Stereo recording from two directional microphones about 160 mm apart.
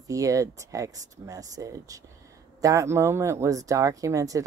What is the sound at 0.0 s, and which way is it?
Speech, 20° right (ahead or behind).